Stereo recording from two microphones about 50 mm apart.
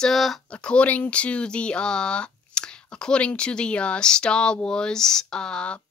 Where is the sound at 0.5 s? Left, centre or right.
Left.